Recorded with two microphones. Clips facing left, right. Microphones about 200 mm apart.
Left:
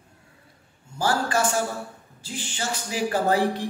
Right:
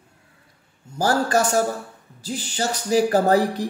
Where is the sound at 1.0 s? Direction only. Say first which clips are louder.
Right 4 dB; 40° right (ahead or behind).